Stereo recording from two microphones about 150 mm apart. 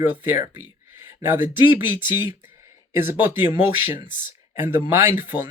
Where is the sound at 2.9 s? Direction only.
15° right (ahead or behind).